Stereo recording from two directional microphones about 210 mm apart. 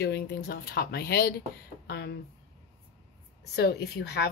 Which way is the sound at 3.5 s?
50° left (ahead or behind).